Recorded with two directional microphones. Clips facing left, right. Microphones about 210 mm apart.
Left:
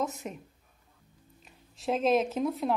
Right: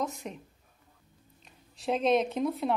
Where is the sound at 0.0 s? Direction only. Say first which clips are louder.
Left 1 dB; 5° left (ahead or behind).